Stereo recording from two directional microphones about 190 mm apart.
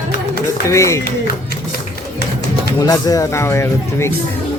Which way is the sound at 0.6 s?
15° left (ahead or behind).